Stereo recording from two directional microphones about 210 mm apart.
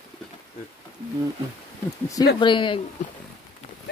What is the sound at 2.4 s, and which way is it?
Speech, 25° left (ahead or behind).